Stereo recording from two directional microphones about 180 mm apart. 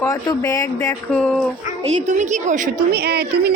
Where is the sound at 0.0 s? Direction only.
20° left (ahead or behind).